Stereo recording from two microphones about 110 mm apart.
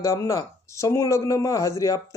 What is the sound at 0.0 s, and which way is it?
Speech, 30° left (ahead or behind).